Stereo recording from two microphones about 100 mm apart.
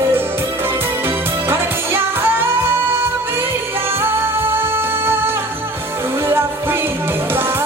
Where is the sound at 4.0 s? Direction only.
25° right (ahead or behind).